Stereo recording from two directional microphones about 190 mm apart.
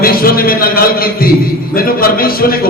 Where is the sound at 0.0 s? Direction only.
50° left (ahead or behind).